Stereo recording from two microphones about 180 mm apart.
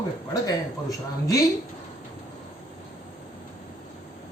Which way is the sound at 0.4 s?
20° left (ahead or behind).